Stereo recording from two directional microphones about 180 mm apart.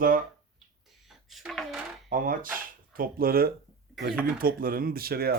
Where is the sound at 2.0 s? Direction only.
50° right (ahead or behind).